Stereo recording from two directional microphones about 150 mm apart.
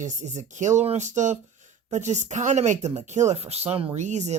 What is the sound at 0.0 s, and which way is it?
Speech, 50° right (ahead or behind).